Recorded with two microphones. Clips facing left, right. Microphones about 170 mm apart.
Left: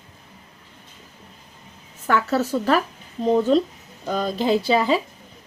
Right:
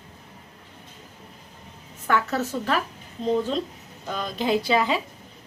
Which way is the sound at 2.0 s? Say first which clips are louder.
Left 3 dB; 35° left (ahead or behind).